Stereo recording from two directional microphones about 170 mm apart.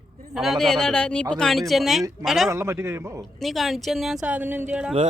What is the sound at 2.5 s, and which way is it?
Speech, 15° right (ahead or behind).